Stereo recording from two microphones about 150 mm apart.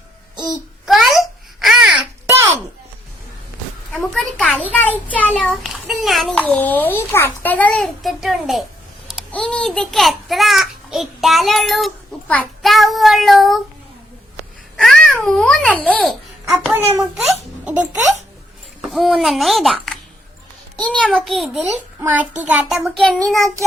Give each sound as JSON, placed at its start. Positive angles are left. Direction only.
{"t": 0.9, "sound": "babbling", "side_deg": 0}
{"t": 3.9, "sound": "a sound", "side_deg": 5}
{"t": 4.7, "sound": "a child's voice", "side_deg": 10}
{"t": 6.3, "sound": "a child's voice", "side_deg": 10}
{"t": 8.0, "sound": "a child's voice", "side_deg": 0}
{"t": 14.8, "sound": "babbling", "side_deg": 5}
{"t": 16.7, "sound": "a child's voice", "side_deg": -20}
{"t": 18.8, "sound": "a child's voice", "side_deg": 0}
{"t": 21.8, "sound": "a child's voice", "side_deg": -10}